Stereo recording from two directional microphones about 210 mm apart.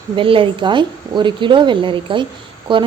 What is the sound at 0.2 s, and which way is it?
Speech, 25° right (ahead or behind).